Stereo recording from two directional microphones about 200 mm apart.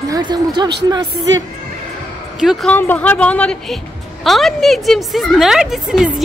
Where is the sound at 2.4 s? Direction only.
Centre (ahead or behind).